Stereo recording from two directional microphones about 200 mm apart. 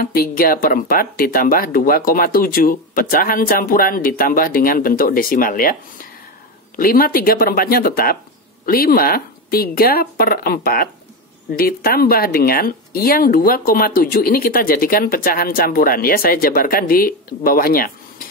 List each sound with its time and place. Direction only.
0.0 s speech: 50° left (ahead or behind)
6.8 s speech: 45° left (ahead or behind)